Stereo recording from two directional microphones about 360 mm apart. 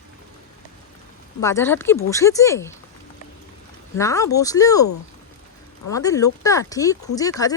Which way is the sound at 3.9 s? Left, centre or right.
Centre.